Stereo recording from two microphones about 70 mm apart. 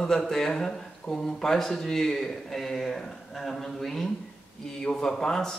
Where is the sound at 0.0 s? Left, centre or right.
Centre.